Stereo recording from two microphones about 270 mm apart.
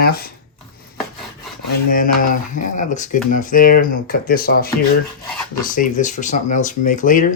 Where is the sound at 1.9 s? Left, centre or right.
Left.